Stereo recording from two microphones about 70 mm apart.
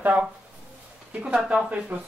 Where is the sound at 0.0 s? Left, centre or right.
Centre.